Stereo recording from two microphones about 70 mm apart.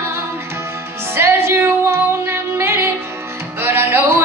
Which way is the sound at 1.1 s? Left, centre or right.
Right.